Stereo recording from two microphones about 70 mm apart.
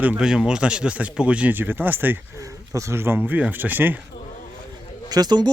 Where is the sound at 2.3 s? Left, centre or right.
Right.